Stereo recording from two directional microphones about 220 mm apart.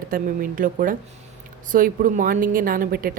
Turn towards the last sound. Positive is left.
turn(degrees=-40)  # may be behind; listen again after turning